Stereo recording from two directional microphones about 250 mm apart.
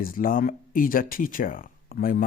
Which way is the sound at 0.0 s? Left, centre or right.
Left.